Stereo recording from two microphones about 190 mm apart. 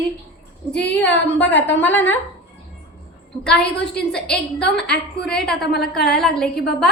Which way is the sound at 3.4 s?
5° left (ahead or behind).